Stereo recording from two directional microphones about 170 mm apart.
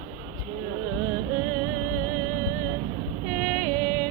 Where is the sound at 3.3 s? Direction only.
Centre (ahead or behind).